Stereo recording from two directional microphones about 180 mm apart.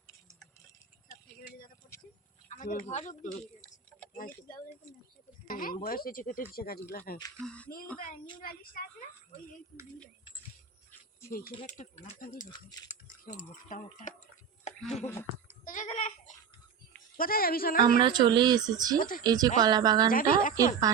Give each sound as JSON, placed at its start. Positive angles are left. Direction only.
{"t": 2.5, "sound": "speech", "side_deg": 45}
{"t": 3.2, "sound": "tick-tock", "side_deg": 5}
{"t": 5.5, "sound": "a woman's voice", "side_deg": 50}
{"t": 7.4, "sound": "speech", "side_deg": 5}
{"t": 7.9, "sound": "speech", "side_deg": 50}
{"t": 11.3, "sound": "a woman's voice", "side_deg": 55}
{"t": 11.6, "sound": "speech", "side_deg": 40}
{"t": 15.6, "sound": "a sound", "side_deg": 45}
{"t": 17.2, "sound": "a woman's voice", "side_deg": 55}
{"t": 18.0, "sound": "speech", "side_deg": -25}
{"t": 18.9, "sound": "speech", "side_deg": 50}
{"t": 19.2, "sound": "speech", "side_deg": -20}
{"t": 20.1, "sound": "speech", "side_deg": 50}
{"t": 20.9, "sound": "speech", "side_deg": -20}